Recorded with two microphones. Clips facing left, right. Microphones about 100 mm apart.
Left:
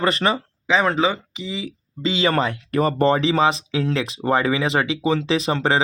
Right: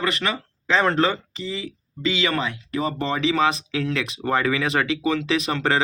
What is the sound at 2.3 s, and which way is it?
Speech, 45° left (ahead or behind).